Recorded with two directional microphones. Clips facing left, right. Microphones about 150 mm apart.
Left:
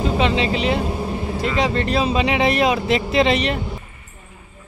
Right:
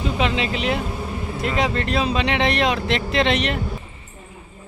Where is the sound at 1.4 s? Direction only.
Centre (ahead or behind).